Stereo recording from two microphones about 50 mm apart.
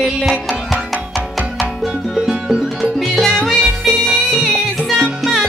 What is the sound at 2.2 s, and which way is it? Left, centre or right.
Music, centre.